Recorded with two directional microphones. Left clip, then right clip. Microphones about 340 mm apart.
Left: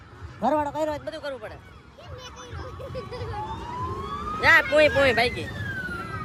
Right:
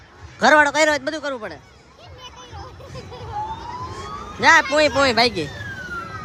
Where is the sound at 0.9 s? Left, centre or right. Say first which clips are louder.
Right 8 dB; centre.